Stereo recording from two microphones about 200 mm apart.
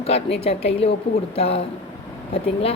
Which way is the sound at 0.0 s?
30° left (ahead or behind).